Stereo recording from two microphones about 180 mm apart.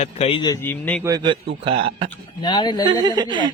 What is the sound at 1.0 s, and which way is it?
A man's voice, 25° right (ahead or behind).